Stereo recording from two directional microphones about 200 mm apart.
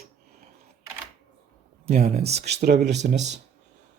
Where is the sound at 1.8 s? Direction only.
35° right (ahead or behind).